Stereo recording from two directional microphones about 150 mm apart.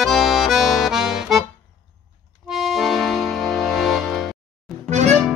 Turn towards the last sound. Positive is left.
turn(degrees=-50)  # may be behind; listen again after turning